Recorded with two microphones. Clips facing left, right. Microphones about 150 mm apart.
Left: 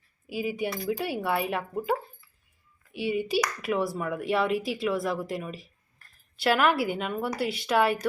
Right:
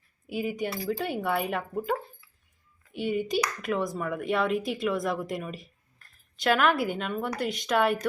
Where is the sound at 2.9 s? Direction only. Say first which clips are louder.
Left 1 dB; 5° left (ahead or behind).